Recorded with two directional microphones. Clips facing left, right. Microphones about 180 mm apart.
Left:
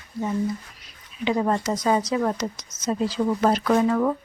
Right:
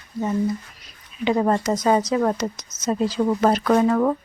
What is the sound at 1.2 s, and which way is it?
Speech, 50° right (ahead or behind).